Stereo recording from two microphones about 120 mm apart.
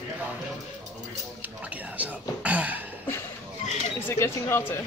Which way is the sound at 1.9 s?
10° right (ahead or behind).